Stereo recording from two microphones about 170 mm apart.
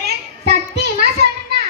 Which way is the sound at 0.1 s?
70° right (ahead or behind).